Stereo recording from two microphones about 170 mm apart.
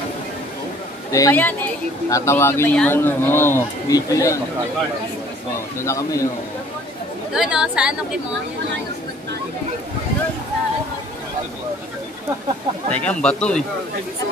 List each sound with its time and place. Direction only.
1.1 s a man's voice: 15° left (ahead or behind)
5.8 s a man's voice: 15° left (ahead or behind)
7.3 s a woman's voice: 5° right (ahead or behind)
12.9 s a man's voice: 5° left (ahead or behind)